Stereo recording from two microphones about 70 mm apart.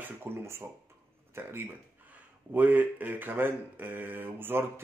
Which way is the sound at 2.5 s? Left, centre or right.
Right.